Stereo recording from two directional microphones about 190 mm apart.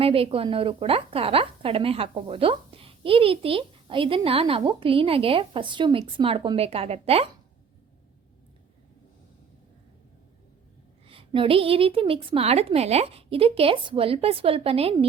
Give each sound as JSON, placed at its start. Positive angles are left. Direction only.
{"t": 0.0, "sound": "a woman's voice", "side_deg": -30}
{"t": 11.0, "sound": "a woman's voice", "side_deg": -30}